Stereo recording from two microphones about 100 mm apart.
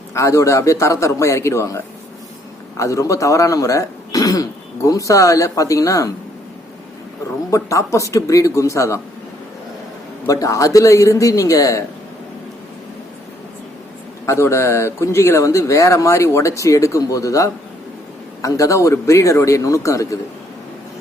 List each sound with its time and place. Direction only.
0.1 s a man's voice: 30° left (ahead or behind)
7.5 s speech: 30° left (ahead or behind)
10.2 s speech: 35° left (ahead or behind)
14.3 s a man's voice: 25° left (ahead or behind)